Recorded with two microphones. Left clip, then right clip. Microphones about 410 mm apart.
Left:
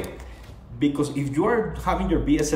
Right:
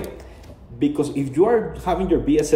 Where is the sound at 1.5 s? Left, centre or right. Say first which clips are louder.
Right 3 dB; centre.